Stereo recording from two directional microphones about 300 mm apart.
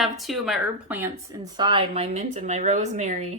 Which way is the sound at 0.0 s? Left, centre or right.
Centre.